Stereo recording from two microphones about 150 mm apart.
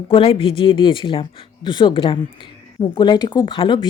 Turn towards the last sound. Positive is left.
turn(degrees=35)  # may be behind; listen again after turning